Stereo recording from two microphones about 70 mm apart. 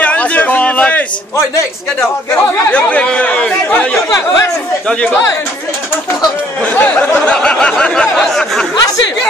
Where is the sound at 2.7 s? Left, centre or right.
Left.